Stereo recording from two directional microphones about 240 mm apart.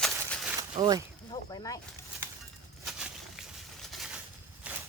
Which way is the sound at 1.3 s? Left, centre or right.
Centre.